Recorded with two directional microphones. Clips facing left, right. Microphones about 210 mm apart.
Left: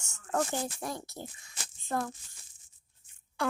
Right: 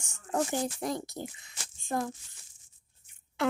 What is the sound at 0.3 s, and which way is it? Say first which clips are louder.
Speech: right 2 dB; 20° right (ahead or behind).